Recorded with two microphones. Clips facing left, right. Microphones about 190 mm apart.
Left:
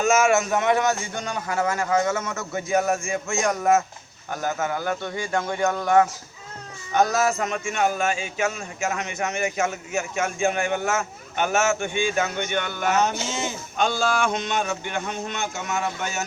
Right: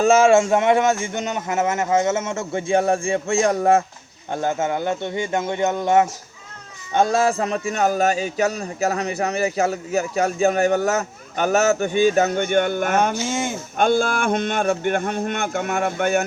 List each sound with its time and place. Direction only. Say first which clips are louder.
0.0 s a man's voice: right 5 dB; 30° right (ahead or behind); by 16.2 s 55° right (ahead or behind)